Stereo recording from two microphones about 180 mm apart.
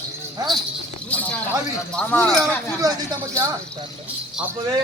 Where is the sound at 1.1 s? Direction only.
10° left (ahead or behind).